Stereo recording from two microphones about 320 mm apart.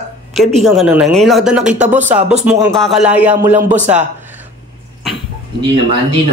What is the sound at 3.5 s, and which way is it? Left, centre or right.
Speech, right.